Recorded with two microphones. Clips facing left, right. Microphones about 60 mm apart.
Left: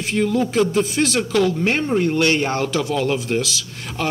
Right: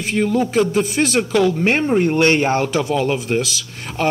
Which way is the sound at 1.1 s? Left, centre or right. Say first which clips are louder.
Right 3 dB; right.